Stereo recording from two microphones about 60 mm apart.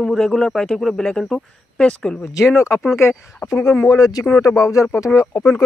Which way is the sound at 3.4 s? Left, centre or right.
Left.